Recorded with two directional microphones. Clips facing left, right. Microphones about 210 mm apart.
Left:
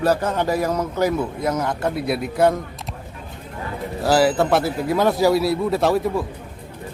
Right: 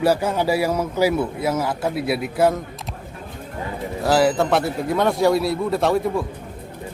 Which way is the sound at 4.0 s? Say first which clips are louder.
Left 1 dB; centre (ahead or behind).